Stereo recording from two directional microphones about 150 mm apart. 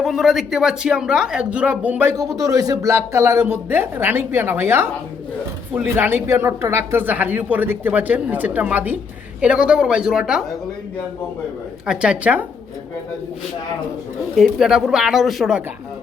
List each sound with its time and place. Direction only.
0.0 s speech: centre (ahead or behind)
2.4 s speech: 25° right (ahead or behind); by 10.4 s 5° right (ahead or behind)
11.9 s speech: 10° right (ahead or behind)
14.3 s speech: centre (ahead or behind)